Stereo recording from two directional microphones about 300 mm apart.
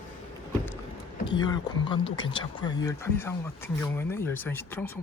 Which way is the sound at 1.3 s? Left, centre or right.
Centre.